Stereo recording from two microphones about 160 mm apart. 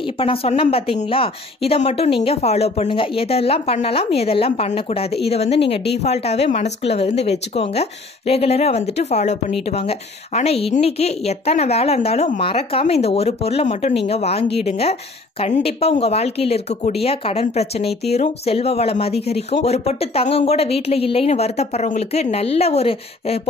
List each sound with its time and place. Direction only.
0.0 s speech: 35° left (ahead or behind)